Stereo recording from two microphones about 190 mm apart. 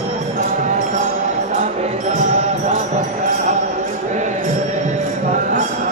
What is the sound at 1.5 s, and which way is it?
Music, 40° right (ahead or behind).